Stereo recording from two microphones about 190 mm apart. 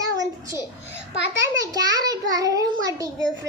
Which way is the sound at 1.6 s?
20° right (ahead or behind).